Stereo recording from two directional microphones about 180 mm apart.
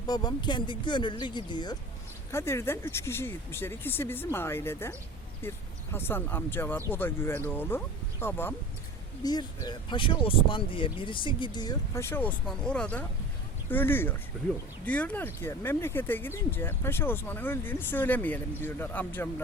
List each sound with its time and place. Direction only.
0.1 s speech: 25° left (ahead or behind)
2.3 s speech: 15° left (ahead or behind)
9.2 s speech: 20° left (ahead or behind)